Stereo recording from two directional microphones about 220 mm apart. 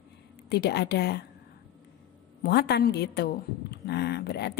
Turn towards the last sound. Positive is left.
turn(degrees=50)  # may be behind; listen again after turning